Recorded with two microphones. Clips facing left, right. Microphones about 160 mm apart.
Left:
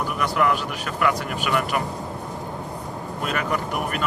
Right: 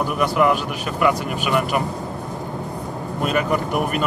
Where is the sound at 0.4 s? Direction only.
20° right (ahead or behind).